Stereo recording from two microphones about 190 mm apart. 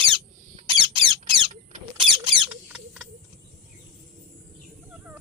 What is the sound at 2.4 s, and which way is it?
Rodents, 5° right (ahead or behind).